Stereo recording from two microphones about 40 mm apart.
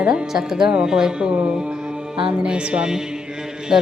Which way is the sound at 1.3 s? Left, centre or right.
Right.